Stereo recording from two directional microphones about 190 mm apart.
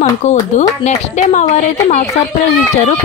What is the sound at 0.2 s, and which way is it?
Speech, 40° left (ahead or behind).